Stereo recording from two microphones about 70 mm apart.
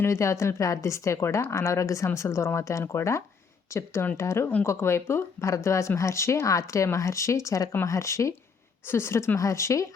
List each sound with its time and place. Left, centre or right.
0.0 s a woman's voice: left